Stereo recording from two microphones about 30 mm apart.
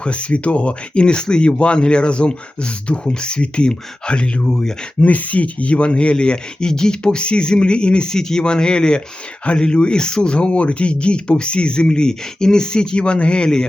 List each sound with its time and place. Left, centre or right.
0.0 s speech: left
4.4 s speech: centre
4.9 s speech: left
8.1 s speech: left